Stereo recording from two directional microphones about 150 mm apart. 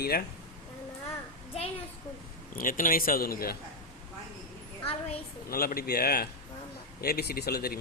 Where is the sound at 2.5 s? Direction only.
65° left (ahead or behind); by 3.6 s 85° left.